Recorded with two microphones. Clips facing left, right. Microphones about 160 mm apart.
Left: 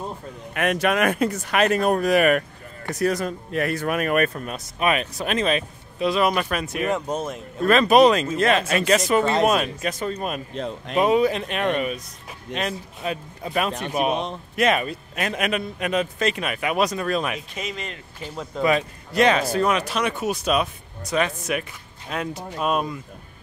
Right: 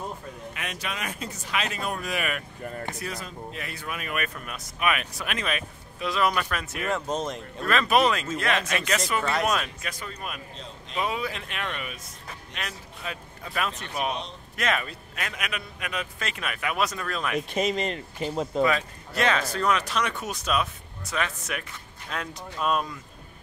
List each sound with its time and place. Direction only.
0.6 s speech: 60° left (ahead or behind)
4.3 s speech: 30° left (ahead or behind); by 7.3 s 10° left (ahead or behind)
7.6 s speech: 25° left (ahead or behind)
10.5 s speech: 60° left (ahead or behind)
12.5 s speech: 25° left (ahead or behind)
17.6 s speech: 35° right (ahead or behind)
18.3 s speech: 25° right (ahead or behind)
18.6 s speech: 20° left (ahead or behind)